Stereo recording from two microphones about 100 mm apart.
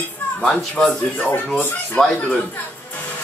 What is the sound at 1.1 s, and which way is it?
Speech, 15° left (ahead or behind).